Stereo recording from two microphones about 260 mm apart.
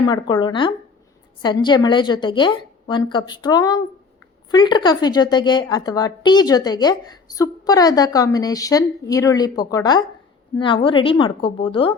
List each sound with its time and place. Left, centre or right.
0.0 s a woman's voice: centre